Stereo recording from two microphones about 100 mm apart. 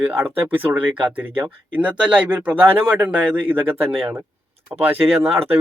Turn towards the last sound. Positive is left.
turn(degrees=-20)  # may be behind; listen again after turning